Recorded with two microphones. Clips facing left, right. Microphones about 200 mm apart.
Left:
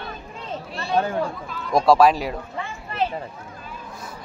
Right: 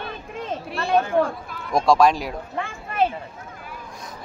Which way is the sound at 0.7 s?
55° right (ahead or behind).